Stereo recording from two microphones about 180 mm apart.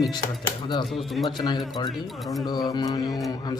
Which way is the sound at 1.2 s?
20° left (ahead or behind).